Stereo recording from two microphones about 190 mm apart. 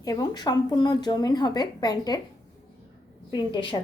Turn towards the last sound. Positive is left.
turn(degrees=25)  # may be behind; listen again after turning